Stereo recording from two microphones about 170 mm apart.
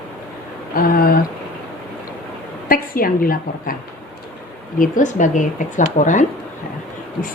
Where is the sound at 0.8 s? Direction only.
60° left (ahead or behind).